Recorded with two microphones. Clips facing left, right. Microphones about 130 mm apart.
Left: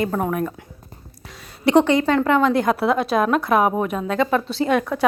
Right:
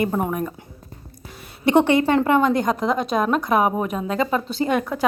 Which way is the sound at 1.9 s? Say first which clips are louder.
Right 1 dB; 60° right (ahead or behind).